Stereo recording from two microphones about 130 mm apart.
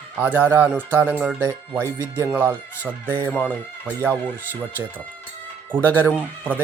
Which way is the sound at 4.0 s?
15° right (ahead or behind).